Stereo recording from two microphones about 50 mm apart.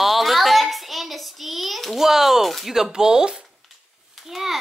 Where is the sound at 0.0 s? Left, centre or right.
Centre.